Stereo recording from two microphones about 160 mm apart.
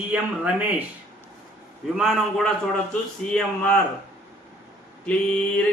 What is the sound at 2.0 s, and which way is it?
Speech, centre (ahead or behind).